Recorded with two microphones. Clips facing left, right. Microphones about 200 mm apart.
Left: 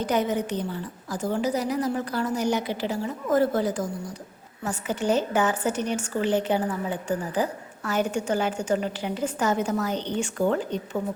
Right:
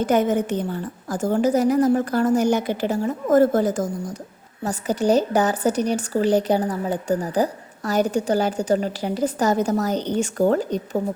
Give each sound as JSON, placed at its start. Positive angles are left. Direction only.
{"t": 0.0, "sound": "a woman's voice", "side_deg": -50}